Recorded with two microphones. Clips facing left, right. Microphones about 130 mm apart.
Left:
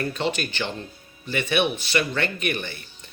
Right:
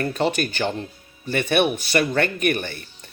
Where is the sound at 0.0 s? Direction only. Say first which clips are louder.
Right 4 dB; 45° right (ahead or behind).